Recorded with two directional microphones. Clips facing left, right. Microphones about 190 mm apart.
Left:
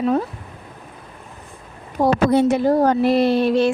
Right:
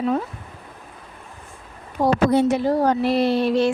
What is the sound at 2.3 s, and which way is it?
Speech, 60° left (ahead or behind).